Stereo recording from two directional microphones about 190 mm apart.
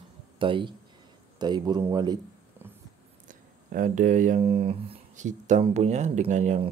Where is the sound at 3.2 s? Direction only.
45° right (ahead or behind).